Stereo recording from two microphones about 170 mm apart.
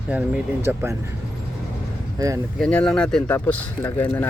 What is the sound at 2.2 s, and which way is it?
Speech, 20° right (ahead or behind).